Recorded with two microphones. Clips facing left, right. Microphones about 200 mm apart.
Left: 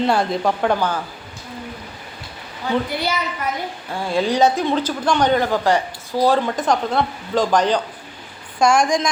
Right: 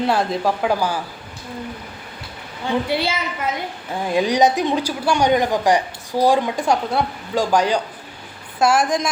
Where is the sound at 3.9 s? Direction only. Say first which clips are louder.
Right 1 dB; 15° right (ahead or behind).